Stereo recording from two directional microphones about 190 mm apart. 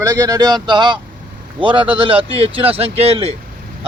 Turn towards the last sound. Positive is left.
turn(degrees=-30)  # may be behind; listen again after turning